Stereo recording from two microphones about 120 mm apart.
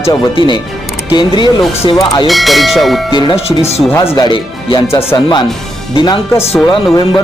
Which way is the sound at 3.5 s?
60° left (ahead or behind).